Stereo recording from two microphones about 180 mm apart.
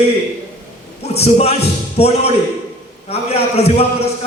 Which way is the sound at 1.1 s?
35° left (ahead or behind).